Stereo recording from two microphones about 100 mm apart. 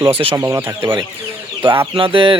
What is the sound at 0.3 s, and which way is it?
Speech, 25° right (ahead or behind).